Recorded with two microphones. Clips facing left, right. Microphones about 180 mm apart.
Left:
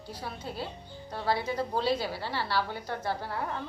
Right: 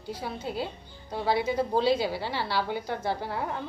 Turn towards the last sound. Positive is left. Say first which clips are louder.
# right 3 dB
turn(degrees=-15)  # may be behind; listen again after turning